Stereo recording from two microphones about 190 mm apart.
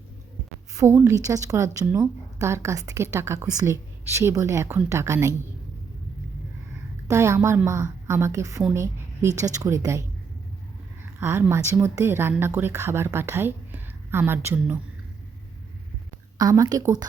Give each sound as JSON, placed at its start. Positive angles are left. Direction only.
{"t": 0.7, "sound": "a woman's voice", "side_deg": -15}
{"t": 7.1, "sound": "a woman's voice", "side_deg": -15}
{"t": 11.2, "sound": "a woman's voice", "side_deg": -10}
{"t": 16.4, "sound": "a woman's voice", "side_deg": -20}